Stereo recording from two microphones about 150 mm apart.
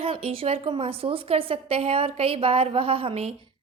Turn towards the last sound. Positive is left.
turn(degrees=-40)  # may be behind; listen again after turning